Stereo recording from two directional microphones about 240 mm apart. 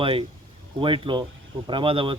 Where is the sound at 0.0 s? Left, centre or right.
Right.